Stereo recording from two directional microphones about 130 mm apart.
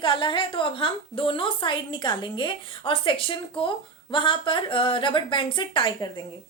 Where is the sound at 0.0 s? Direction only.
40° left (ahead or behind).